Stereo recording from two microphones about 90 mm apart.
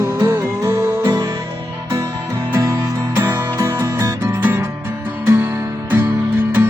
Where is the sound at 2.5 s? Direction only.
35° right (ahead or behind).